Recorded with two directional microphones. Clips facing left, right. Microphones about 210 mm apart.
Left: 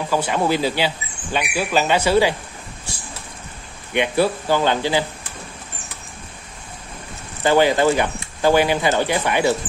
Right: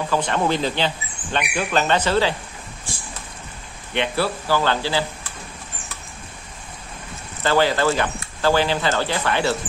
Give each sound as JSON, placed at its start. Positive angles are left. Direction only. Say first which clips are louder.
{"t": 0.1, "sound": "speech", "louder": "left 2 dB", "side_deg": 10}
{"t": 3.9, "sound": "speech", "louder": "left 4 dB", "side_deg": 15}
{"t": 7.4, "sound": "speech", "louder": "left 3 dB", "side_deg": 15}